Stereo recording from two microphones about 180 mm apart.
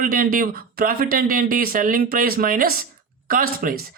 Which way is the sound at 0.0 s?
50° right (ahead or behind).